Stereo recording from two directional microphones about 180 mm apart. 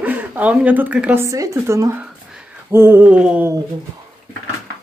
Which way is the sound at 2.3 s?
15° right (ahead or behind).